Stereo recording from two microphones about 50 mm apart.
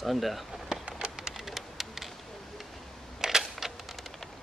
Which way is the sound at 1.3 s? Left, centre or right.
Centre.